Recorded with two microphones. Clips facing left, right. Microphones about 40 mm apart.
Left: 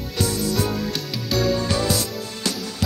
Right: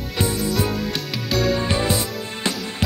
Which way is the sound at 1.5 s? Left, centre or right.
Right.